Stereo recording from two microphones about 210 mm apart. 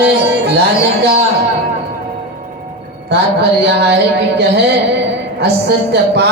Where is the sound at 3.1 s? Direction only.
50° right (ahead or behind).